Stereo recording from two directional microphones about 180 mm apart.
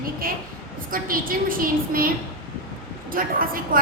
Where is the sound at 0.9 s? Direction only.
50° right (ahead or behind).